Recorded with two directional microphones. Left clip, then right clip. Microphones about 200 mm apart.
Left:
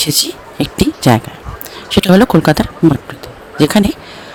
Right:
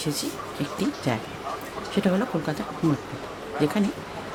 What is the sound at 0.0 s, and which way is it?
Speech, 50° left (ahead or behind).